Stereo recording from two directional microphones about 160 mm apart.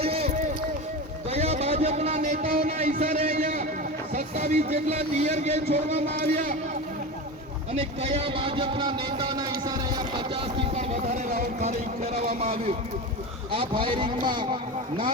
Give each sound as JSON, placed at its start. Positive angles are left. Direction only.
{"t": 0.0, "sound": "run", "side_deg": -40}
{"t": 1.3, "sound": "a sound", "side_deg": -40}
{"t": 2.6, "sound": "music", "side_deg": -45}
{"t": 2.9, "sound": "a sound", "side_deg": -55}
{"t": 4.1, "sound": "speech", "side_deg": -50}
{"t": 7.7, "sound": "speech", "side_deg": -40}
{"t": 11.1, "sound": "speech", "side_deg": -50}
{"t": 12.4, "sound": "speech", "side_deg": -40}